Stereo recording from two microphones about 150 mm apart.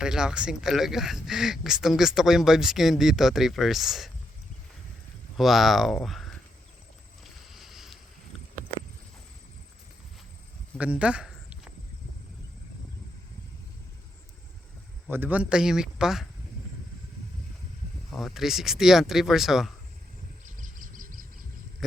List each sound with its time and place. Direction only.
0.0 s speech: 5° right (ahead or behind)
5.4 s speech: centre (ahead or behind)
7.5 s boat: centre (ahead or behind)
10.8 s a sound: 10° right (ahead or behind)
15.1 s speech: 10° right (ahead or behind)
18.1 s speech: centre (ahead or behind)
20.4 s a sound: 60° right (ahead or behind)